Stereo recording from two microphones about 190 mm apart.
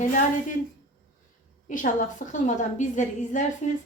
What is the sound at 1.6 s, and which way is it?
Speech, 45° left (ahead or behind).